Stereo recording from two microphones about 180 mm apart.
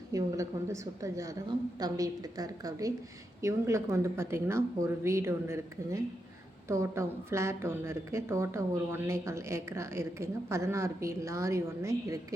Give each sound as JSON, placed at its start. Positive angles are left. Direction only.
{"t": 0.1, "sound": "a woman's voice", "side_deg": -15}